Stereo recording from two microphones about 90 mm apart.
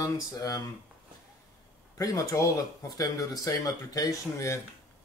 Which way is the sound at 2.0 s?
40° left (ahead or behind).